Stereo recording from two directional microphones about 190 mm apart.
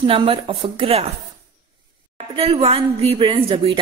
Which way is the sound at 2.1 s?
30° right (ahead or behind).